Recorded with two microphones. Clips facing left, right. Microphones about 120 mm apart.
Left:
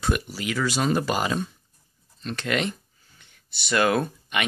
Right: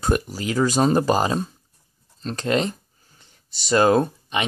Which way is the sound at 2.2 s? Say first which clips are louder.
Right 4 dB; 35° right (ahead or behind).